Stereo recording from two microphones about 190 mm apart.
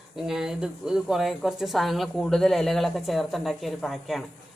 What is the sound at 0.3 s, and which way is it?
A woman's voice, 5° right (ahead or behind).